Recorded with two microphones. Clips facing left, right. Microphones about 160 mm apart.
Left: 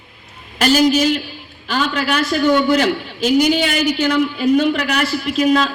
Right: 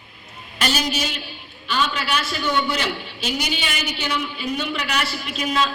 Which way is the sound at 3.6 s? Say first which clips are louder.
Left 11 dB; 65° left (ahead or behind).